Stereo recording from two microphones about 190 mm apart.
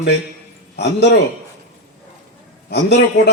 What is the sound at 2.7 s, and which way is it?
Speech, 60° left (ahead or behind).